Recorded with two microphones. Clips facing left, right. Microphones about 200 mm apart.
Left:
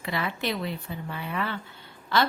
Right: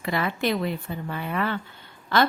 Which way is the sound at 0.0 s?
50° right (ahead or behind).